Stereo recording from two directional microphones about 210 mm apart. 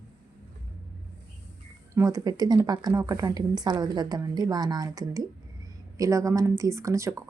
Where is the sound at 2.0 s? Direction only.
15° right (ahead or behind).